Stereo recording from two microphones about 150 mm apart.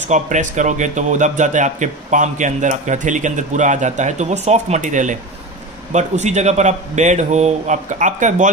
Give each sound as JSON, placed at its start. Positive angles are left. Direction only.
{"t": 0.1, "sound": "speech", "side_deg": -55}